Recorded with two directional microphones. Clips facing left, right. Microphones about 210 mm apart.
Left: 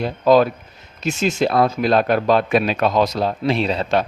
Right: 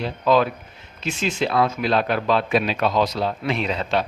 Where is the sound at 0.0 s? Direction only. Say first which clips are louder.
Left 5 dB; 40° left (ahead or behind).